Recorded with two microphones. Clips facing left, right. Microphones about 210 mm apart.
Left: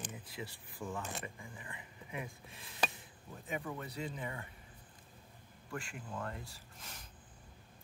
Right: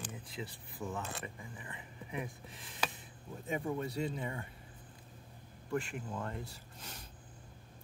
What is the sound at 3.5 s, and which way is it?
Speech, 25° right (ahead or behind).